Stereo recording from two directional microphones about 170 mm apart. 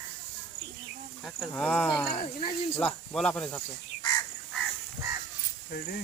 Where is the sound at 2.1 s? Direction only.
30° left (ahead or behind).